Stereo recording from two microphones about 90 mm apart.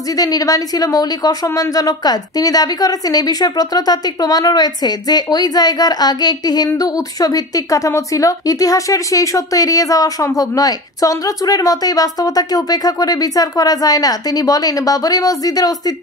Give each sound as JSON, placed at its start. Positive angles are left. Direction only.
{"t": 0.2, "sound": "speech", "side_deg": 45}